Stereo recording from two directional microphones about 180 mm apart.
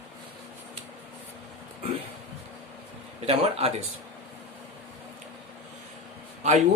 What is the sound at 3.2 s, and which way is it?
Speech, 35° right (ahead or behind).